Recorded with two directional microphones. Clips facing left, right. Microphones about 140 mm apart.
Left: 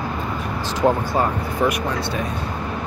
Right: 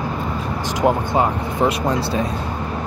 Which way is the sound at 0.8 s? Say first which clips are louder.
Right 1 dB; 20° right (ahead or behind).